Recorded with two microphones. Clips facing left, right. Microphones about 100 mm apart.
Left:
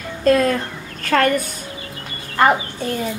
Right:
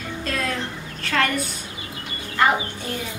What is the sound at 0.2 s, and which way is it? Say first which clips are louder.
A woman's voice: left 12 dB; 45° left (ahead or behind).